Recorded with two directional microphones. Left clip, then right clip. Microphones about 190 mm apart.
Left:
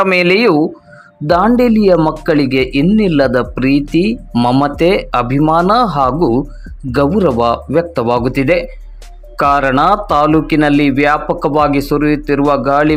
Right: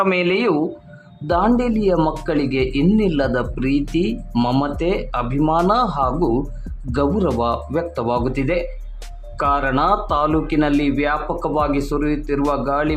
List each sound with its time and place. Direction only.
0.0 s speech: 25° left (ahead or behind)
4.6 s speech: 25° left (ahead or behind)